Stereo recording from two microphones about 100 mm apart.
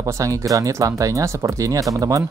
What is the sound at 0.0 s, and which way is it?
Speech, 30° right (ahead or behind).